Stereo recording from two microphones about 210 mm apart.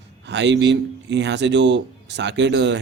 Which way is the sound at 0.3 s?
55° right (ahead or behind).